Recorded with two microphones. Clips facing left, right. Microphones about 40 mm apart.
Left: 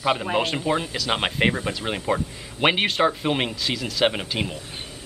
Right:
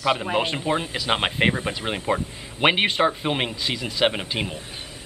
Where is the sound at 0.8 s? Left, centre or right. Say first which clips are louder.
Right 1 dB; centre.